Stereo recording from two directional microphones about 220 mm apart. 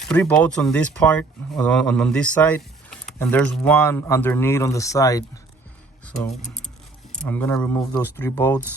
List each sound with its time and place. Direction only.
0.0 s speech: 5° left (ahead or behind)
7.1 s speech: 5° left (ahead or behind)